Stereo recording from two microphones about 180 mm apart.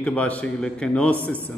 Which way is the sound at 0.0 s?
5° left (ahead or behind).